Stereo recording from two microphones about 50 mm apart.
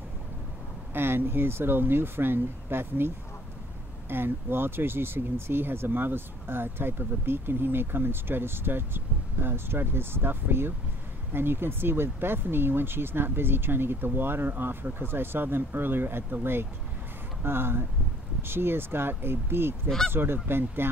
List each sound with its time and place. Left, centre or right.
0.9 s speech: right
4.1 s speech: right